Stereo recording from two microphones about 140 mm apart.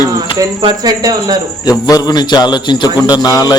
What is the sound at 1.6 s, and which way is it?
A man's voice, 25° left (ahead or behind).